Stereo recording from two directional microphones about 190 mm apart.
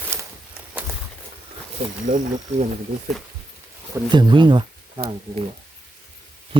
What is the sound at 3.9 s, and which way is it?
Speech, 25° right (ahead or behind).